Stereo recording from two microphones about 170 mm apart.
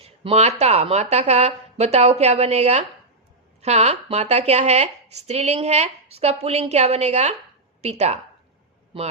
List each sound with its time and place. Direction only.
0.0 s a woman's voice: 40° right (ahead or behind)